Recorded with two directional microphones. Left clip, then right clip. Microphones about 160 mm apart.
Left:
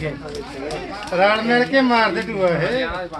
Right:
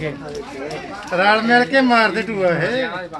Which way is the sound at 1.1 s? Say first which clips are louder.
Right 2 dB; 85° right.